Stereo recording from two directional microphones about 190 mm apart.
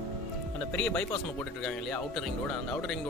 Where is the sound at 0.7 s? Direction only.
5° left (ahead or behind).